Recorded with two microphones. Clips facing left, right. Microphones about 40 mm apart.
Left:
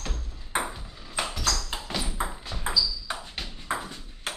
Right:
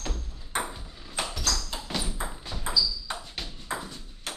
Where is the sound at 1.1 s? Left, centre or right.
Centre.